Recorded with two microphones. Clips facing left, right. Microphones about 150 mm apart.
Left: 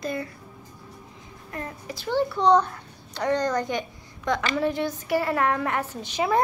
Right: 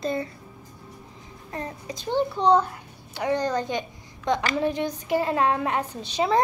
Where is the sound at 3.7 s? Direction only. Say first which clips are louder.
Even; 20° right (ahead or behind).